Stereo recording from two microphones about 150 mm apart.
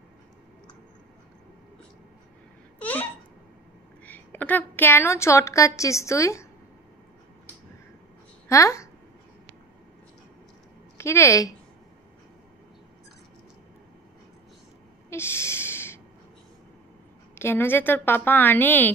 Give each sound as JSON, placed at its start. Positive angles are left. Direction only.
{"t": 2.8, "sound": "babbling", "side_deg": 10}
{"t": 4.0, "sound": "a woman's voice", "side_deg": 10}
{"t": 8.5, "sound": "a woman's voice", "side_deg": 20}
{"t": 11.0, "sound": "a woman's voice", "side_deg": 20}
{"t": 15.0, "sound": "a sound", "side_deg": 15}
{"t": 17.4, "sound": "a woman's voice", "side_deg": 15}